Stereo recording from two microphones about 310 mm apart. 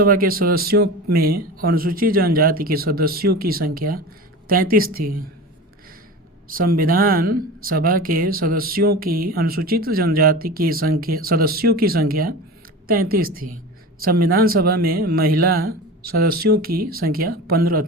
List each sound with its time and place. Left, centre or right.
0.0 s speech: right
6.5 s speech: right